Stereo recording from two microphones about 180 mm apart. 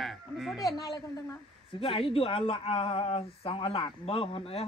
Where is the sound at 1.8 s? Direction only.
30° left (ahead or behind).